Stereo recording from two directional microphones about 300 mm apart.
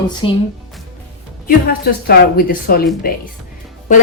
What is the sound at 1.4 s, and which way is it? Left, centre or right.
Speech, left.